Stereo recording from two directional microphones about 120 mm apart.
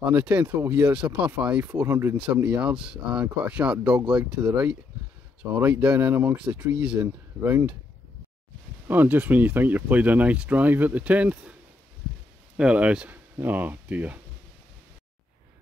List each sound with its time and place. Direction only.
0.0 s speech: 10° right (ahead or behind)
8.8 s speech: 15° right (ahead or behind)
12.5 s speech: 10° right (ahead or behind)